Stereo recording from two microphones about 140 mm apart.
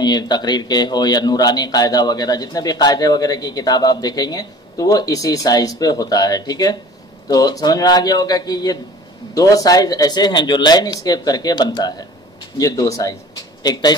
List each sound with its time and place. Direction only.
0.0 s speech: 30° left (ahead or behind)